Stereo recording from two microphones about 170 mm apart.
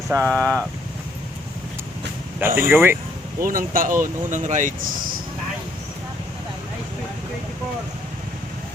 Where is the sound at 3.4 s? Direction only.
55° right (ahead or behind).